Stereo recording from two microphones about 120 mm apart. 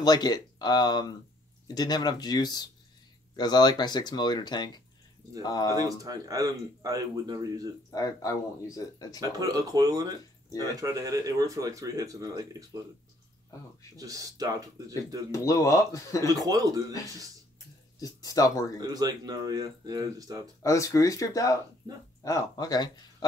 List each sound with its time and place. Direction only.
0.0 s speech: 35° left (ahead or behind)
5.8 s speech: 30° right (ahead or behind)
7.9 s speech: 30° left (ahead or behind)
9.2 s speech: 30° right (ahead or behind)
13.9 s speech: 30° right (ahead or behind)
15.3 s speech: 25° left (ahead or behind)
16.3 s speech: 30° right (ahead or behind)
17.9 s speech: 30° left (ahead or behind)
18.8 s speech: 35° right (ahead or behind)
20.6 s speech: 25° left (ahead or behind)
21.8 s speech: 35° right (ahead or behind)
22.2 s speech: 30° left (ahead or behind)